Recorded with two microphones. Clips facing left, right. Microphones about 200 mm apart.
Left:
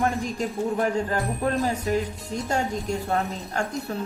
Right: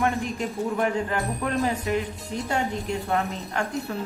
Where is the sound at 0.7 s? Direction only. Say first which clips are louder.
Even; 40° left (ahead or behind).